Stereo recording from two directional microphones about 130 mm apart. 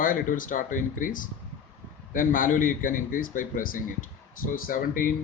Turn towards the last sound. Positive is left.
turn(degrees=90)